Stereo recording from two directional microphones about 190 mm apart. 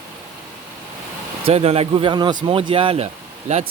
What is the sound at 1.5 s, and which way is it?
Speech, 30° right (ahead or behind).